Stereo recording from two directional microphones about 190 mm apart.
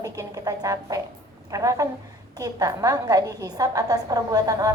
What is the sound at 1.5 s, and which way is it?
A woman's voice, 15° right (ahead or behind).